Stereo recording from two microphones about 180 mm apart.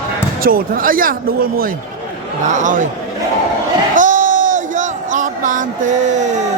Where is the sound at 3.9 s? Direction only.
45° right (ahead or behind).